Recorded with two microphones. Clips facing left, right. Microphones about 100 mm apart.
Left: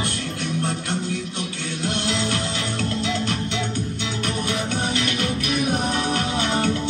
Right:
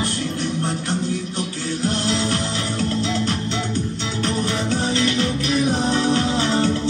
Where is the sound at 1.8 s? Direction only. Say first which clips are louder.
Right 2 dB; 35° right (ahead or behind).